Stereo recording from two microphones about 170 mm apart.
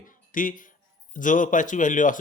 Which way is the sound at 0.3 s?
50° left (ahead or behind).